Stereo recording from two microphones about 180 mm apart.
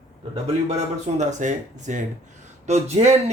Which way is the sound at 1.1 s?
40° right (ahead or behind).